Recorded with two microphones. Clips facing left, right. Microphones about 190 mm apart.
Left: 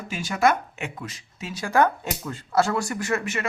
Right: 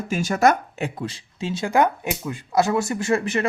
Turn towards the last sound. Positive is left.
turn(degrees=-30)  # may be behind; listen again after turning